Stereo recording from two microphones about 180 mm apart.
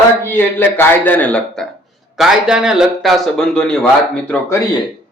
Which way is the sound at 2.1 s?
5° right (ahead or behind).